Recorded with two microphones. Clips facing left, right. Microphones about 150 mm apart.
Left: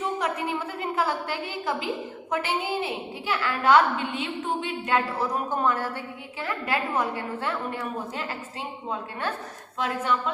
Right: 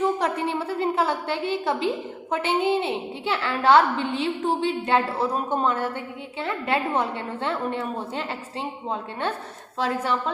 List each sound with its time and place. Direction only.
0.0 s a woman's voice: 30° right (ahead or behind)
9.8 s a woman's voice: 35° right (ahead or behind)